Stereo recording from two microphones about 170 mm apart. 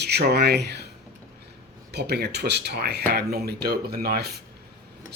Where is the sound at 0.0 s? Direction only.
75° right (ahead or behind).